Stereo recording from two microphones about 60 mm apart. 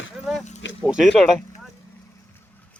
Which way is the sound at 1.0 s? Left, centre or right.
Centre.